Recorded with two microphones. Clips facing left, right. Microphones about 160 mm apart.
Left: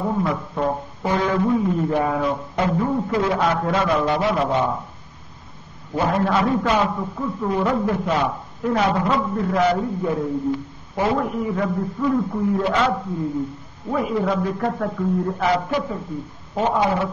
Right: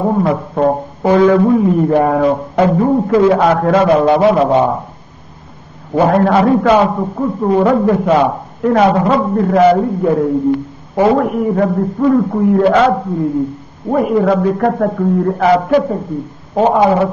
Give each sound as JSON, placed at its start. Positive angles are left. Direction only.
{"t": 0.0, "sound": "a man's voice", "side_deg": -55}
{"t": 1.0, "sound": "a man's voice", "side_deg": -65}
{"t": 2.8, "sound": "a man's voice", "side_deg": -45}
{"t": 3.1, "sound": "a man's voice", "side_deg": -65}
{"t": 5.9, "sound": "a man's voice", "side_deg": -60}
{"t": 7.6, "sound": "a man's voice", "side_deg": -65}
{"t": 16.5, "sound": "a man's voice", "side_deg": -70}